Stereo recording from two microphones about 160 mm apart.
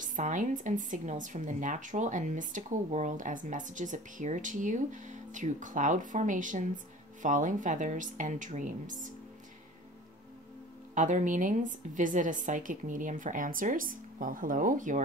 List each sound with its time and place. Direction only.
0.0 s speech: 55° right (ahead or behind)
11.0 s speech: 55° right (ahead or behind)